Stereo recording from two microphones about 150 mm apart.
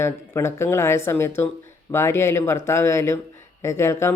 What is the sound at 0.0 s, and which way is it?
Speech, 20° left (ahead or behind).